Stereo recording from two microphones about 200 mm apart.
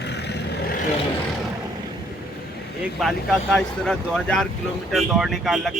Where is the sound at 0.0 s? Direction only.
55° left (ahead or behind).